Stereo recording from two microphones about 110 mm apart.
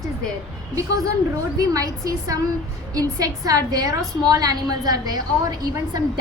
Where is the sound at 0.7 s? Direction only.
35° right (ahead or behind).